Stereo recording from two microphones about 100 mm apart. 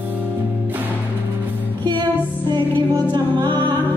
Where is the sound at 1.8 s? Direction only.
50° right (ahead or behind).